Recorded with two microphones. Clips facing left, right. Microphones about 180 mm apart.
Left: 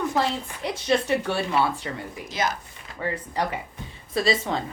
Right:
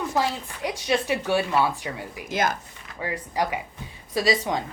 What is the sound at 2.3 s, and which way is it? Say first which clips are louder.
Speech: right 2 dB; 50° right (ahead or behind).